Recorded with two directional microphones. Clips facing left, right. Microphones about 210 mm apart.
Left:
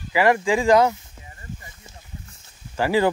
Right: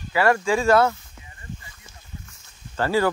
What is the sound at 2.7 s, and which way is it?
Speech, 15° left (ahead or behind).